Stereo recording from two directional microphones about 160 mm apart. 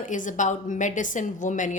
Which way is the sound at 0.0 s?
55° left (ahead or behind).